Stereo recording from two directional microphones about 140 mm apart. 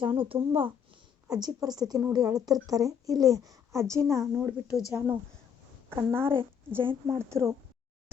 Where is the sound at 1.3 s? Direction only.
30° right (ahead or behind).